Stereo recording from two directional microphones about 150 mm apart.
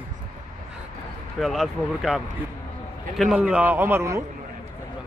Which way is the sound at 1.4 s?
Centre (ahead or behind).